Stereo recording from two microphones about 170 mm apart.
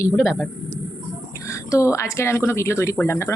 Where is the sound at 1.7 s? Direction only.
20° left (ahead or behind).